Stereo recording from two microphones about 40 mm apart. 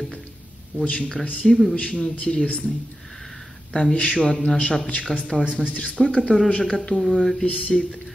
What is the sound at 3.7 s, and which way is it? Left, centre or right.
Speech, left.